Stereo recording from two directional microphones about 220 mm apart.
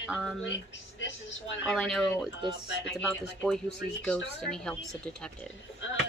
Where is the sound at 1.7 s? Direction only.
Centre (ahead or behind).